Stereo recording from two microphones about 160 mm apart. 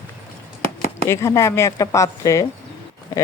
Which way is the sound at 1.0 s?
15° left (ahead or behind).